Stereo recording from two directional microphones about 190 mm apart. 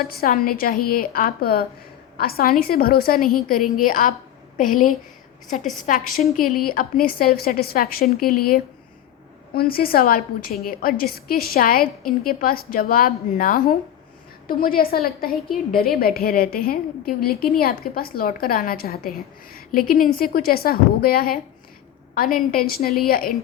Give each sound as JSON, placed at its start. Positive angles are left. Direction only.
{"t": 0.1, "sound": "a woman's voice", "side_deg": 50}